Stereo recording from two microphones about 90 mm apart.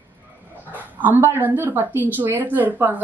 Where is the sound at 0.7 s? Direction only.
20° right (ahead or behind).